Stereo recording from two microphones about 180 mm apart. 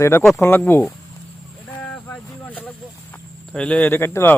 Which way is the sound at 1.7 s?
10° left (ahead or behind).